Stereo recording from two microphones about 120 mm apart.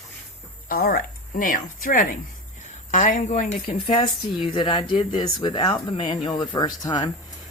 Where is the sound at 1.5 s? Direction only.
90° left; by 3.8 s 75° left (ahead or behind).